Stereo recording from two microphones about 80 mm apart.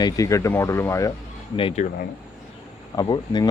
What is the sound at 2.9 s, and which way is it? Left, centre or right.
Speech, left.